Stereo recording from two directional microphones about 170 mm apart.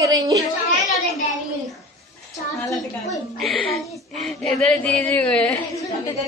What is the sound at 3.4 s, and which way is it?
A woman's voice, centre (ahead or behind).